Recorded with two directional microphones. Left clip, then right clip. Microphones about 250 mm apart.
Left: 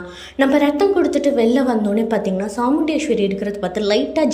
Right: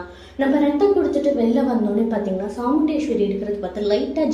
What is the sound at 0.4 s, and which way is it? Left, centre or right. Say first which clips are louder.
Speech: left 4 dB; left.